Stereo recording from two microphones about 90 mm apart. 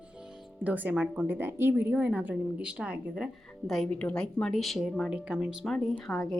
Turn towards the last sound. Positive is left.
turn(degrees=5)  # may be behind; listen again after turning